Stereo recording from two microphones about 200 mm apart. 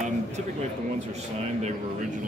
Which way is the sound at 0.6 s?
35° right (ahead or behind).